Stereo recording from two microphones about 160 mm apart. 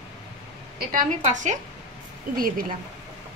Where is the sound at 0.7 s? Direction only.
55° right (ahead or behind).